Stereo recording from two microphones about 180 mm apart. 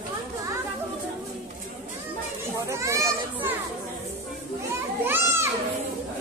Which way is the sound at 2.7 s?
15° right (ahead or behind).